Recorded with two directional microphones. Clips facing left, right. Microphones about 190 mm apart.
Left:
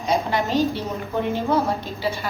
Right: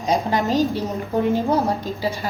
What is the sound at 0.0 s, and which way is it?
Speech, 40° right (ahead or behind).